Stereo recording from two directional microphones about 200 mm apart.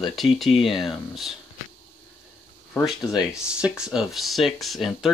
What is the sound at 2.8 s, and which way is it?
Speech, centre (ahead or behind).